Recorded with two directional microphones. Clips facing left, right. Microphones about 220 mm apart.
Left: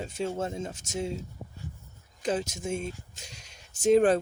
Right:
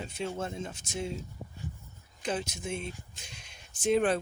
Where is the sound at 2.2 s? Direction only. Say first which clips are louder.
Left 4 dB; 45° left (ahead or behind).